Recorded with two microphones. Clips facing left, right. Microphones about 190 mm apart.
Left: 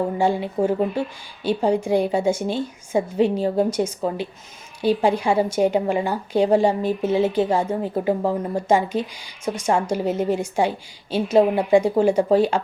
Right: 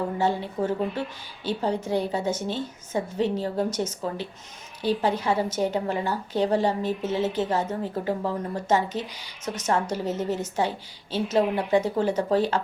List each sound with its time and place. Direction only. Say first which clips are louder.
0.2 s a woman's voice: left 5 dB; 10° left (ahead or behind)